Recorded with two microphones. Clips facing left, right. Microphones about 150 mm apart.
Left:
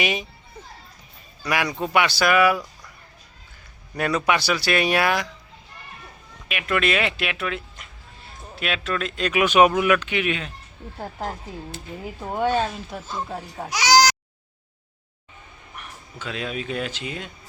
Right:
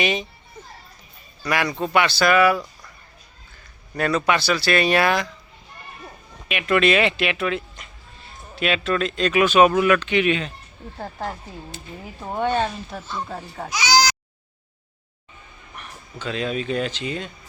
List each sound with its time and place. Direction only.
0.0 s speech: 10° left (ahead or behind)
1.5 s speech: 10° left (ahead or behind)
3.9 s speech: 10° left (ahead or behind)
6.5 s speech: centre (ahead or behind)
13.7 s speech: 80° left
15.7 s speech: 5° left (ahead or behind)